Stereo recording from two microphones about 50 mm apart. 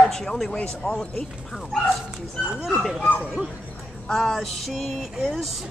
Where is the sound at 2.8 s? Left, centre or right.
Centre.